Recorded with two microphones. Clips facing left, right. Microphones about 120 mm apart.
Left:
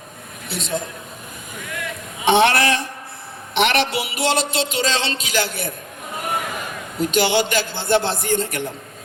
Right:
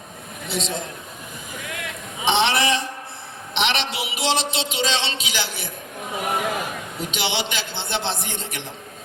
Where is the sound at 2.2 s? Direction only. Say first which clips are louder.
Left 5 dB; 50° left (ahead or behind).